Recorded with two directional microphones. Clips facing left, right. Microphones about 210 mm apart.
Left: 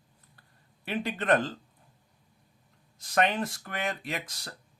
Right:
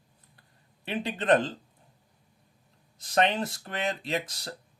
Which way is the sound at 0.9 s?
20° right (ahead or behind).